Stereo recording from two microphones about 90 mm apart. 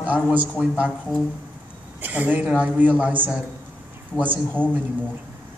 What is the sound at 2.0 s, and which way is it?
A man's voice, 20° right (ahead or behind).